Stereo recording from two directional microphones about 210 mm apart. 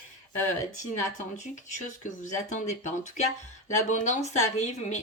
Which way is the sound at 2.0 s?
35° left (ahead or behind).